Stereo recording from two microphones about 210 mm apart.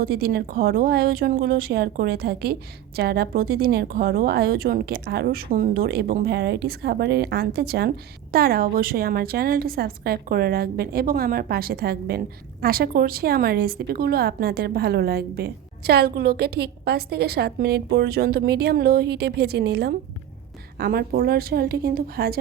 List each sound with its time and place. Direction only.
0.0 s speech: 45° right (ahead or behind)